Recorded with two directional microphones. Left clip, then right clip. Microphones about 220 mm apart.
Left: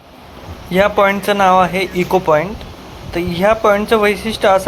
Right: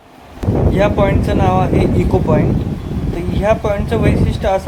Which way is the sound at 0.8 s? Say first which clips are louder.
Left 4 dB; 15° left (ahead or behind).